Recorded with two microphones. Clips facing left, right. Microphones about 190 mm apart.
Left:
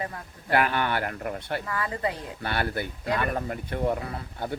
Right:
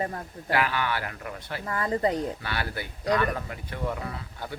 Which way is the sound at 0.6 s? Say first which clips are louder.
Left 2 dB; 50° left (ahead or behind).